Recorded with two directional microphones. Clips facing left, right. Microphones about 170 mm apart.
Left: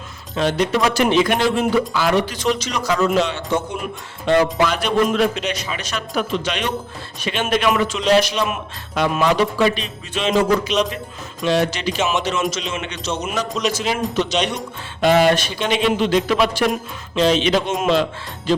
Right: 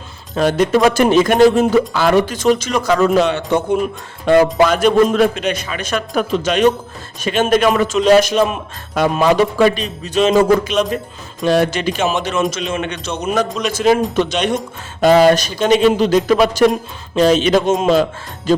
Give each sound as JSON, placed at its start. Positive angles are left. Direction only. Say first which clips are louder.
{"t": 0.3, "sound": "a man's voice", "louder": "right 5 dB", "side_deg": -50}
{"t": 4.3, "sound": "a man's voice", "louder": "right 5 dB", "side_deg": -45}
{"t": 15.0, "sound": "a man's voice", "louder": "right 5 dB", "side_deg": -40}